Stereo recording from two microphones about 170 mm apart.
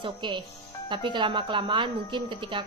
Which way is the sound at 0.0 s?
30° right (ahead or behind).